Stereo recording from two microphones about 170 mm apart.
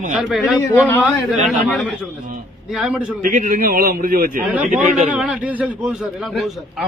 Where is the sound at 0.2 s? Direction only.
5° right (ahead or behind).